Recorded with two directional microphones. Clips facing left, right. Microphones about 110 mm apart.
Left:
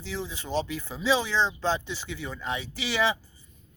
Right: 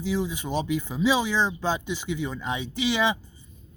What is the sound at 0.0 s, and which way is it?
Speech, 15° right (ahead or behind).